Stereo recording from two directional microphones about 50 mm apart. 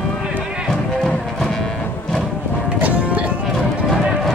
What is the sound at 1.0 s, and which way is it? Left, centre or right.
Music, centre.